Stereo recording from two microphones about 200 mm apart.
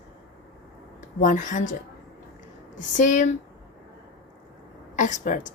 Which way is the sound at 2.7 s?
40° left (ahead or behind).